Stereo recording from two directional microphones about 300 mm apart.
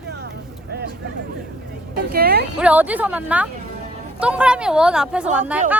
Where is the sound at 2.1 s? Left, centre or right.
Right.